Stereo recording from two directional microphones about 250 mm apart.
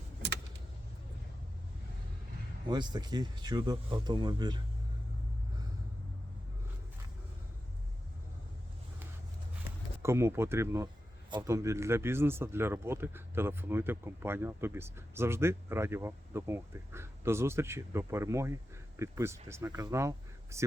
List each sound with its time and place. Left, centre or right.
2.6 s a man's voice: centre
10.0 s a man's voice: centre